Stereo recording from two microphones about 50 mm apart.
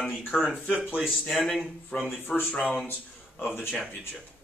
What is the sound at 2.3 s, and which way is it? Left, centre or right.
Speech, left.